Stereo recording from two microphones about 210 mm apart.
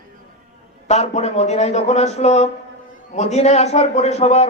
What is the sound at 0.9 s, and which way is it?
A man's voice, 30° left (ahead or behind).